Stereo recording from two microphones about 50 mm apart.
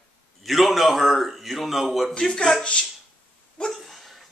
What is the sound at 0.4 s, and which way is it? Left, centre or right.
A man's voice, centre.